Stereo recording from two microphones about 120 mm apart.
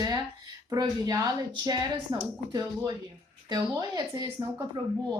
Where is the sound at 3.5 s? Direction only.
30° right (ahead or behind).